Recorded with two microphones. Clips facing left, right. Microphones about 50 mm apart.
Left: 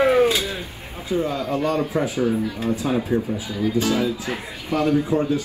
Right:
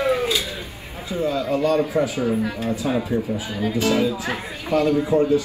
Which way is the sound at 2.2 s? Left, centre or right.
Right.